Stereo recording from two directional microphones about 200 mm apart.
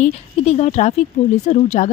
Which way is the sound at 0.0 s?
35° left (ahead or behind).